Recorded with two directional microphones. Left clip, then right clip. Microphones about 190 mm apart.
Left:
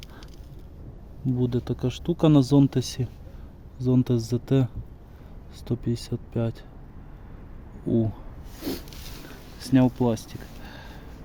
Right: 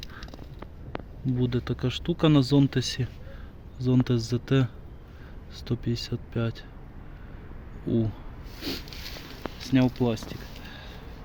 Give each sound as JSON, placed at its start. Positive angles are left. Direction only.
{"t": 1.4, "sound": "speech", "side_deg": 15}
{"t": 7.9, "sound": "speech", "side_deg": 15}
{"t": 9.6, "sound": "a sound", "side_deg": 20}